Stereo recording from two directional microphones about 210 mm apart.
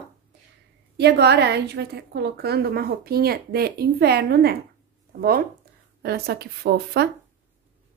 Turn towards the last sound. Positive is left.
turn(degrees=-50)  # may be behind; listen again after turning